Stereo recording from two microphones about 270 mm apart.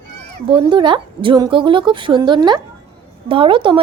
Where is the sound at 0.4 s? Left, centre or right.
Centre.